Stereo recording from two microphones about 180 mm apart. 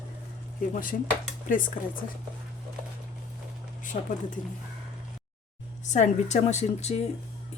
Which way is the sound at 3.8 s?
45° left (ahead or behind).